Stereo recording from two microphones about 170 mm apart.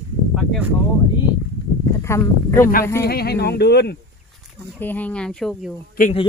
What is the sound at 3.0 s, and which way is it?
Speech, 70° left (ahead or behind).